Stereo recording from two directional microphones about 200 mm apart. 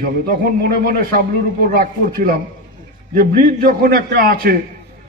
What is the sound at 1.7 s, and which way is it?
A man's voice, 45° right (ahead or behind).